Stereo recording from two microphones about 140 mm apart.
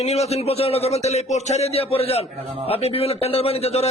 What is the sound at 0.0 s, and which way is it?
A man's voice, 50° left (ahead or behind).